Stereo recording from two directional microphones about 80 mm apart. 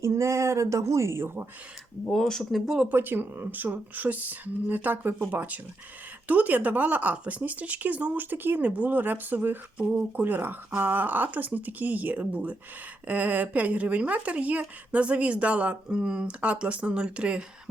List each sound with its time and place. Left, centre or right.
0.0 s speech: right
2.0 s speech: centre
2.9 s speech: right